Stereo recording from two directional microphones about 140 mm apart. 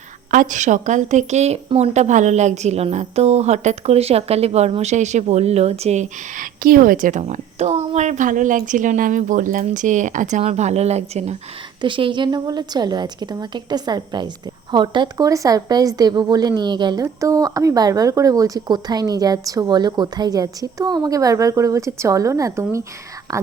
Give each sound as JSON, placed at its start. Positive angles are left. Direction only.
{"t": 0.3, "sound": "a woman's voice", "side_deg": -65}
{"t": 11.8, "sound": "a woman's voice", "side_deg": -35}